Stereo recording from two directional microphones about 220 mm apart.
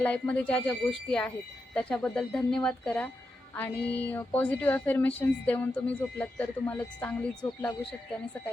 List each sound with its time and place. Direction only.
0.0 s speech: 5° left (ahead or behind)
3.5 s music: 10° left (ahead or behind)
4.0 s speech: 10° left (ahead or behind)